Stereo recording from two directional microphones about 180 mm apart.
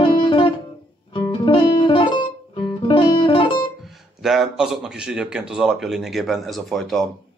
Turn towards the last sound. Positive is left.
turn(degrees=0)  # may be behind; listen again after turning